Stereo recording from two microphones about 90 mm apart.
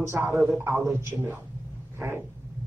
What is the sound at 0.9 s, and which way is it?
Speech, 25° right (ahead or behind).